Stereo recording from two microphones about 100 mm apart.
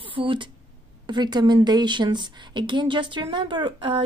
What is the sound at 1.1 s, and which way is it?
A woman's voice, 45° right (ahead or behind).